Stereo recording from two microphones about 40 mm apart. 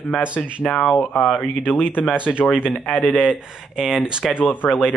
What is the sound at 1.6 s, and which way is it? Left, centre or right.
Speech, left.